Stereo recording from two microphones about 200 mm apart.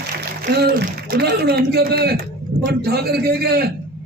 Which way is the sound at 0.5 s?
55° right (ahead or behind).